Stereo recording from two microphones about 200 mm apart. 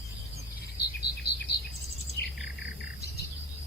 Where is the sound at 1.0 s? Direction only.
55° left (ahead or behind).